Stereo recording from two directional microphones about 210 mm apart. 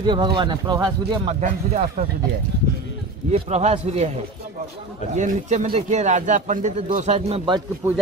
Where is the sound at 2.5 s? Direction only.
55° right (ahead or behind).